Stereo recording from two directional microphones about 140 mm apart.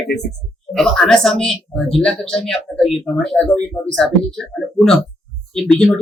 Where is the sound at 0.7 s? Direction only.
Centre (ahead or behind).